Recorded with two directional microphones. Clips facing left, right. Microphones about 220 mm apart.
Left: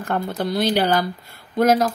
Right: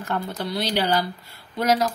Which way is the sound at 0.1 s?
55° left (ahead or behind).